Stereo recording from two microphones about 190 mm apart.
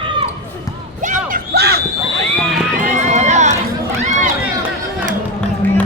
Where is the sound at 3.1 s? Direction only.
40° right (ahead or behind).